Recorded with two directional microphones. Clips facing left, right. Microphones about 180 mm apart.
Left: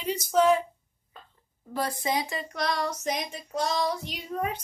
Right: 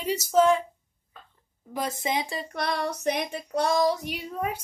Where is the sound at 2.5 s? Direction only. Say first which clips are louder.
Even; 55° right (ahead or behind).